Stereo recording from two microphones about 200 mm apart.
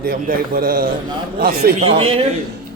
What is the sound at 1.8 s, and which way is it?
Speech, 30° right (ahead or behind).